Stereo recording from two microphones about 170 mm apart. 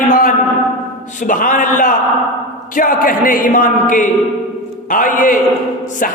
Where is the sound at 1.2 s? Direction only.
50° left (ahead or behind).